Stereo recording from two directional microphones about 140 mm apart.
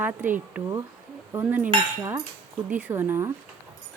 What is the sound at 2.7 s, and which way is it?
Speech, 15° right (ahead or behind).